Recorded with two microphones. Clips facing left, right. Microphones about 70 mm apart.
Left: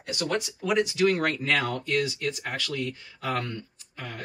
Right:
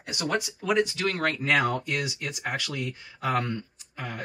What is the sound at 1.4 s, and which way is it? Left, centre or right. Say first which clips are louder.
Speech: right 2 dB; centre.